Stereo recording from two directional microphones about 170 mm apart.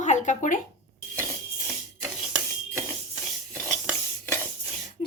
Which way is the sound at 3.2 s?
Centre (ahead or behind).